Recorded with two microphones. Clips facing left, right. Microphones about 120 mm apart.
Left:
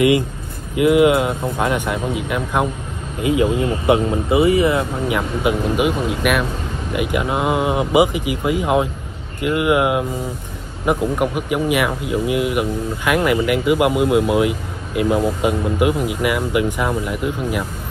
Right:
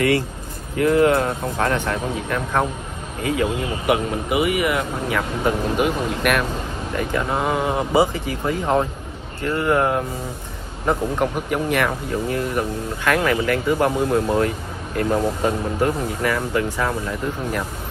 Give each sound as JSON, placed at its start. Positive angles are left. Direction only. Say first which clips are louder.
{"t": 0.7, "sound": "speech", "louder": "left 3 dB", "side_deg": 15}